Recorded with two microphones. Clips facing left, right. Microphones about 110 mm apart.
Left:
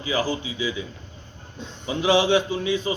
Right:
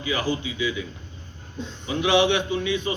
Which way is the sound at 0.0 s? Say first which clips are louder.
Left 1 dB; 30° left (ahead or behind).